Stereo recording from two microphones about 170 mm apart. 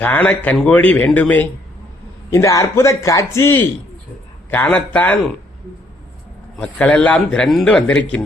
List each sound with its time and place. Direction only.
0.0 s speech: 10° left (ahead or behind)
6.6 s speech: 5° left (ahead or behind)